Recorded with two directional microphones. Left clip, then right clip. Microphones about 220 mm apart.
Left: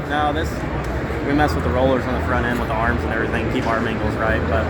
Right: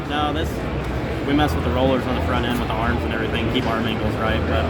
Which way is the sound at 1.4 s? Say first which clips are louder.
Left 2 dB; 5° left (ahead or behind).